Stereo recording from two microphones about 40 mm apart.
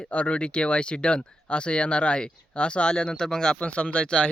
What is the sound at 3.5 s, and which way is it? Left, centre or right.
Speech, left.